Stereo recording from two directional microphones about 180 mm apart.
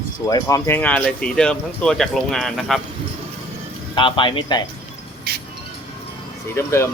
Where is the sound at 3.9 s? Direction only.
25° left (ahead or behind).